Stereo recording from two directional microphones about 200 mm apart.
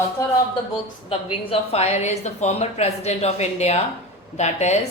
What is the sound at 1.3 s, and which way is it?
A woman's voice, 30° left (ahead or behind).